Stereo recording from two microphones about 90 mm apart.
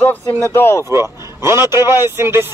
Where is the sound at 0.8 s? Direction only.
30° right (ahead or behind).